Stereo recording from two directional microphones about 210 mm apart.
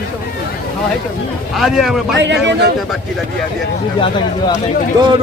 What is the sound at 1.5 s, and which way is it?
Speech, centre (ahead or behind).